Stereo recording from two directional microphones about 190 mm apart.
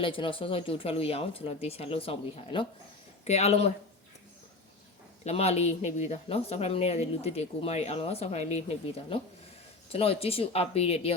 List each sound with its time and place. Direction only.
0.0 s speech: 25° left (ahead or behind)
5.2 s speech: 35° left (ahead or behind)